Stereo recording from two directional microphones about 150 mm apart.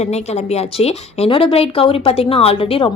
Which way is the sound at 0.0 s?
45° left (ahead or behind).